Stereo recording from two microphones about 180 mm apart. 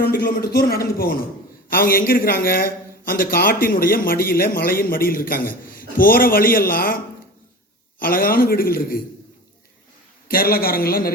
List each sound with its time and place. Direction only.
0.0 s a man's voice: 60° left (ahead or behind)
10.2 s a man's voice: 55° left (ahead or behind)